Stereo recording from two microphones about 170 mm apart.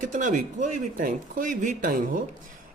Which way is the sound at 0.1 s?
50° right (ahead or behind).